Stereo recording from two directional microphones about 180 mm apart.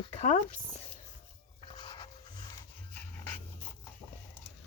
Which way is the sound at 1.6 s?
25° left (ahead or behind).